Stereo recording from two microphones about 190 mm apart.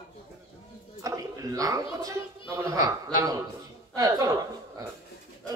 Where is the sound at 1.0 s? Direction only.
15° right (ahead or behind).